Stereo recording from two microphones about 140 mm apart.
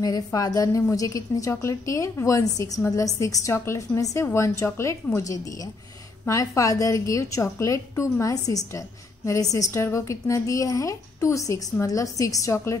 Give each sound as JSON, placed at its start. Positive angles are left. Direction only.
{"t": 0.0, "sound": "a woman's voice", "side_deg": 25}